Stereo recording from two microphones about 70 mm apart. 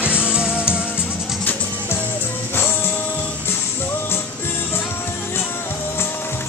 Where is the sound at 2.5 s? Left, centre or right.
Left.